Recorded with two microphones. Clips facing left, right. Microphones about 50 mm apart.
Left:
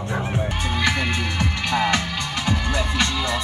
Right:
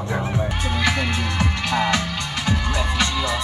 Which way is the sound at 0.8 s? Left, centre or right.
Centre.